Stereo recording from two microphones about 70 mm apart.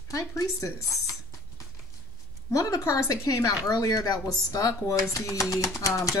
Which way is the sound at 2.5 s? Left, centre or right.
Left.